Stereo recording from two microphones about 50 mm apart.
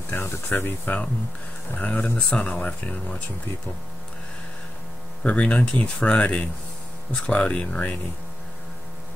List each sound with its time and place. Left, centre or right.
0.1 s speech: left
0.8 s speech: left
5.2 s speech: left